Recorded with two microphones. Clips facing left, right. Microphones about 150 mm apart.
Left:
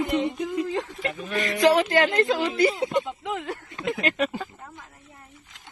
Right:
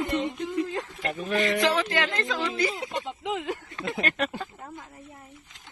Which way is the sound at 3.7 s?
25° left (ahead or behind).